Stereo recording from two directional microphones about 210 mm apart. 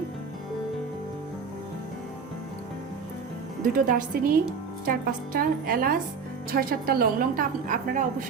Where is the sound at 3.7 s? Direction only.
40° right (ahead or behind).